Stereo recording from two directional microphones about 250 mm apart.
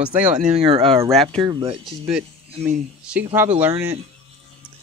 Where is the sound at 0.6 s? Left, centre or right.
Right.